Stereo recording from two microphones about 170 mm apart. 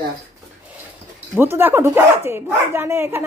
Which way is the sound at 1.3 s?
15° right (ahead or behind).